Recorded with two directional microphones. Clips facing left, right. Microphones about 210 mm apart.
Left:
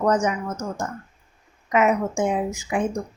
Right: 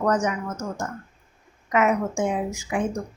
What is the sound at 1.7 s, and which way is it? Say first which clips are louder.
A woman's voice: left 1 dB; 20° left (ahead or behind).